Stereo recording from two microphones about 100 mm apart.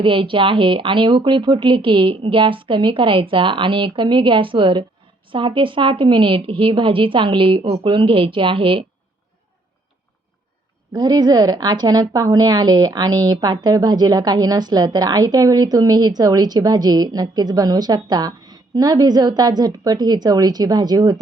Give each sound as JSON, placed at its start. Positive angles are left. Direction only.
{"t": 0.0, "sound": "speech", "side_deg": -60}
{"t": 10.9, "sound": "a woman's voice", "side_deg": -45}